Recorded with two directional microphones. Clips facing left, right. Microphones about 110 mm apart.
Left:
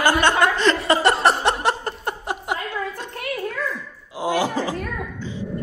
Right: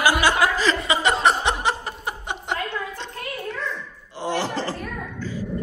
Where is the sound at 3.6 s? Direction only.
10° left (ahead or behind).